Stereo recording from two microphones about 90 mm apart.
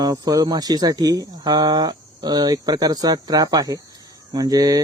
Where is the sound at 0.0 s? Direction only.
45° right (ahead or behind).